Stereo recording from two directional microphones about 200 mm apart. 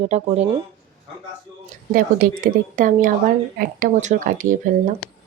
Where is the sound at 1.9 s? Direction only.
45° right (ahead or behind).